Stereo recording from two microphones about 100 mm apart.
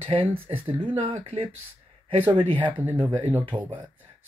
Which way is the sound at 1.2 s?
90° right.